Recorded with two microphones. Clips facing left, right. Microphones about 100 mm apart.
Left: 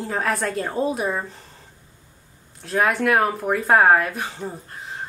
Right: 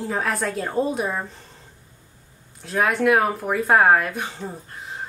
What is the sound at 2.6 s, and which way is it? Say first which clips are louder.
Speech: even; centre (ahead or behind).